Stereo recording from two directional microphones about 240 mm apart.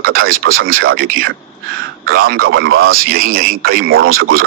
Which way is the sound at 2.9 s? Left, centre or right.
Right.